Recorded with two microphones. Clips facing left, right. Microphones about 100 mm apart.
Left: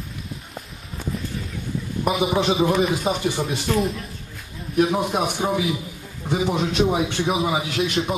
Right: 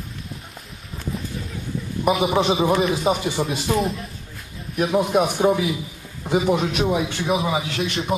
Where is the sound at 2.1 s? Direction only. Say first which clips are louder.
Right 2 dB; centre (ahead or behind).